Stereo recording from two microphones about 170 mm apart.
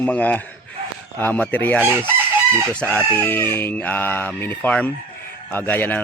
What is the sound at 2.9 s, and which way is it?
Speech, 10° left (ahead or behind).